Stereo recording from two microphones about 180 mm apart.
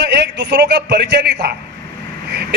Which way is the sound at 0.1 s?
75° right (ahead or behind).